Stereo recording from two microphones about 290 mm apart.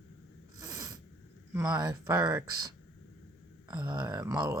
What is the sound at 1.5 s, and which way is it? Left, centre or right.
Speech, centre.